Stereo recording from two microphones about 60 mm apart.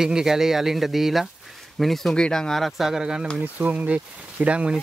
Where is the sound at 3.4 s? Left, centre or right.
Right.